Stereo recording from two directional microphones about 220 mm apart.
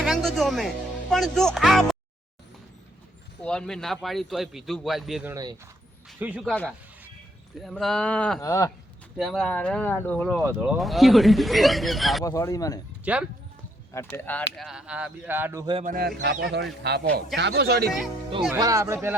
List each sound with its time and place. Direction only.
0.0 s speech: centre (ahead or behind)
3.4 s speech: 5° left (ahead or behind)
5.3 s speech: 15° right (ahead or behind)
6.1 s speech: 5° right (ahead or behind)
6.5 s speech: 5° left (ahead or behind)
9.1 s speech: centre (ahead or behind)
12.2 s speech: 15° left (ahead or behind)
13.1 s speech: 5° right (ahead or behind)
13.9 s speech: 10° left (ahead or behind)
14.5 s speech: centre (ahead or behind)
15.6 s speech: 25° right (ahead or behind)
15.9 s speech: 40° right (ahead or behind)
18.6 s speech: 15° right (ahead or behind)